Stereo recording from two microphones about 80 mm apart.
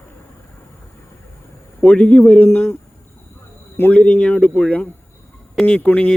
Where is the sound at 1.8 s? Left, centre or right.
Centre.